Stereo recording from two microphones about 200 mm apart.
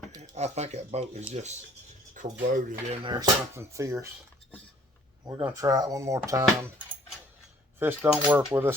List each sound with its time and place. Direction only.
0.2 s speech: 35° right (ahead or behind)
2.2 s a sound: 40° right (ahead or behind)
2.5 s speech: 40° right (ahead or behind)
3.0 s speech: 20° right (ahead or behind)
5.4 s speech: 15° right (ahead or behind)
7.8 s speech: 10° right (ahead or behind)